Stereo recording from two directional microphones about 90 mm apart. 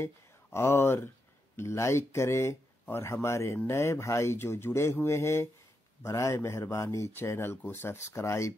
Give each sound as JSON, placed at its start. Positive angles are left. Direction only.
{"t": 0.0, "sound": "speech", "side_deg": 30}